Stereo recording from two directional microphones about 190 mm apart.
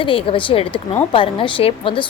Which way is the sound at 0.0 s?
30° left (ahead or behind).